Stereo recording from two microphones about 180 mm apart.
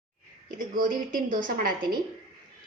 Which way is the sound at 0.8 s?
50° right (ahead or behind).